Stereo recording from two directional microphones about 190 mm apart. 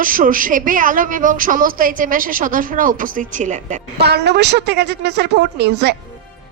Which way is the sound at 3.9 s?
60° right (ahead or behind).